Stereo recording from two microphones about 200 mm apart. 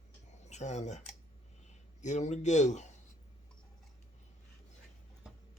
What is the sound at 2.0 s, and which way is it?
Speech, 35° left (ahead or behind).